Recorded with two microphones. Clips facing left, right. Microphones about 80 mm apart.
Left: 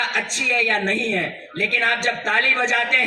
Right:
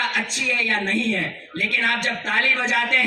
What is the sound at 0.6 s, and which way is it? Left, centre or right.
A man's voice, left.